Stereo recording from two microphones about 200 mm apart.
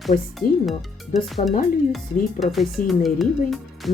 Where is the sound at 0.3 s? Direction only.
Centre (ahead or behind).